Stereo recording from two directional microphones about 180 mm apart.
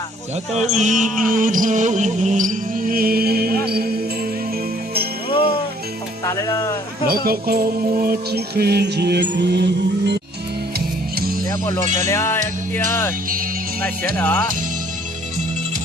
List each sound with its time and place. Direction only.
0.7 s music: 40° right (ahead or behind); by 3.8 s 60° right (ahead or behind)
6.2 s music: 15° left (ahead or behind)
7.1 s music: 55° right (ahead or behind)
10.8 s music: 60° right (ahead or behind)
12.0 s music: 15° left (ahead or behind)
14.2 s music: 10° left (ahead or behind)